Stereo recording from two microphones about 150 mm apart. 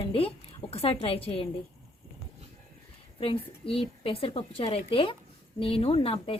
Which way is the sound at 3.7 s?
40° left (ahead or behind).